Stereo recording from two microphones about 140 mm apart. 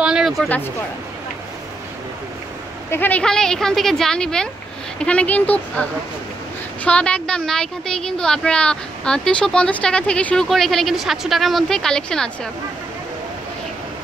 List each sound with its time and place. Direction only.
0.0 s a sound: 5° right (ahead or behind)
0.5 s a woman's voice: 15° left (ahead or behind)
2.9 s a woman's voice: 10° left (ahead or behind)